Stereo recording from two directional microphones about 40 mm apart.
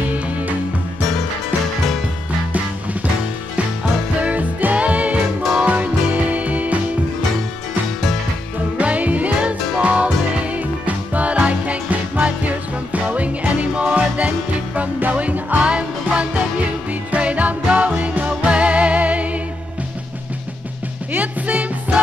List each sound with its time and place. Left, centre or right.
0.0 s music: right
4.2 s music: right
8.7 s music: right
15.6 s music: right
21.1 s music: right